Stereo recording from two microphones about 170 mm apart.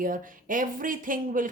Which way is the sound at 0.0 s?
55° right (ahead or behind).